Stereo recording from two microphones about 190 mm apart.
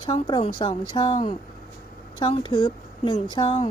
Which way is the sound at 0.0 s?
25° left (ahead or behind).